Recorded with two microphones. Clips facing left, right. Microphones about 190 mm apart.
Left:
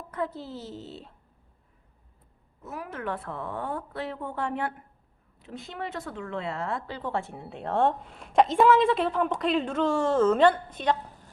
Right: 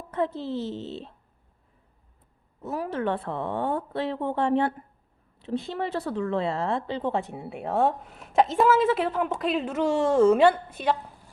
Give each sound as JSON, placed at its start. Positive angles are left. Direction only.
{"t": 0.1, "sound": "a woman's voice", "side_deg": -25}
{"t": 2.6, "sound": "a woman's voice", "side_deg": -35}